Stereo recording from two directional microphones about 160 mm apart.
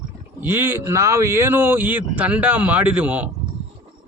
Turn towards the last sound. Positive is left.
turn(degrees=-10)  # may be behind; listen again after turning